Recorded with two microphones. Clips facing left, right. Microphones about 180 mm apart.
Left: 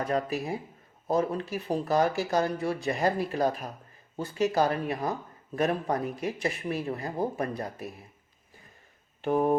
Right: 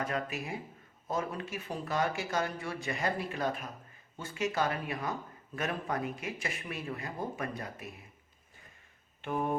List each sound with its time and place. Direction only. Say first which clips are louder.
0.0 s speech: left 6 dB; 35° left (ahead or behind)
9.2 s speech: left 8 dB; 35° left (ahead or behind)